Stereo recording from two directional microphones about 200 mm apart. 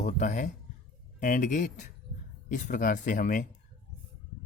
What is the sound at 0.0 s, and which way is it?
Speech, 40° left (ahead or behind).